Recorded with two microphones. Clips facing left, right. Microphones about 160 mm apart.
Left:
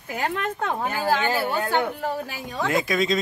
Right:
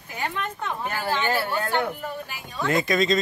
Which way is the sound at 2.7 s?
5° left (ahead or behind).